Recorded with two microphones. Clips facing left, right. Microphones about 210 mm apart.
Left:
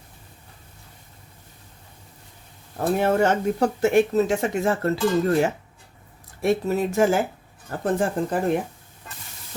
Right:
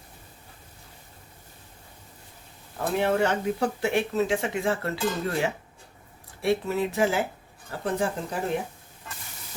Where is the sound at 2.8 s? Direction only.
45° left (ahead or behind).